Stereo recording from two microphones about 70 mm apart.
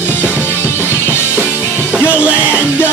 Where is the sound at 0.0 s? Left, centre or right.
Left.